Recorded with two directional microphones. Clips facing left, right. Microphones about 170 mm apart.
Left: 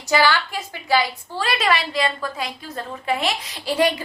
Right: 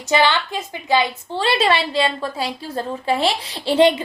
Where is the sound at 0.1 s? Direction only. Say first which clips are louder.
Right 1 dB; 20° right (ahead or behind).